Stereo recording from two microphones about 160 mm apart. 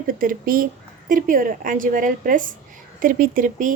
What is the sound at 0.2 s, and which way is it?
A woman's voice, 60° right (ahead or behind).